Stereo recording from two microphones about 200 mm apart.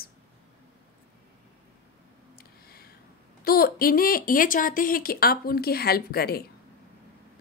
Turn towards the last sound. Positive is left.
turn(degrees=50)  # may be behind; listen again after turning